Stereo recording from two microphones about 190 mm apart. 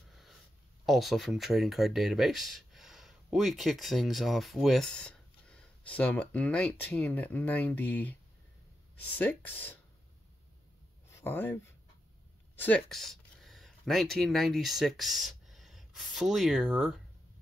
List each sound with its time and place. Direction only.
0.8 s speech: centre (ahead or behind)
11.1 s speech: 10° left (ahead or behind)